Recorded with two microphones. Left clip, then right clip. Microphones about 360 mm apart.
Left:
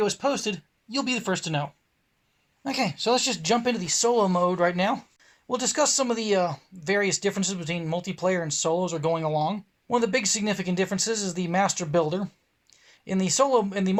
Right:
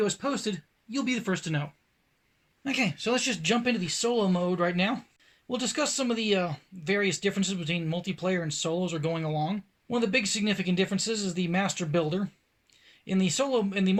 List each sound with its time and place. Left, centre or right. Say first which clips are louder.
0.0 s speech: left 4 dB; centre
2.6 s speech: left 3 dB; centre